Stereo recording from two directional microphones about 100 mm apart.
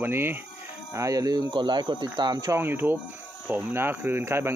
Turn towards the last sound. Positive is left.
turn(degrees=-25)  # may be behind; listen again after turning